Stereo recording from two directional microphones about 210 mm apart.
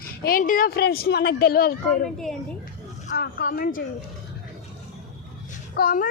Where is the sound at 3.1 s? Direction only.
45° left (ahead or behind).